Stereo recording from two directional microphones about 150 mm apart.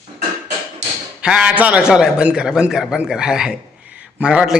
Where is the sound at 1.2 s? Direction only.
5° right (ahead or behind).